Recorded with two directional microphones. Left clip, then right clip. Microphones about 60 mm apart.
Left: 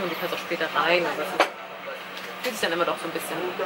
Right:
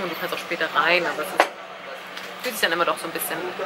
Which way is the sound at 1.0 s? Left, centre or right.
Centre.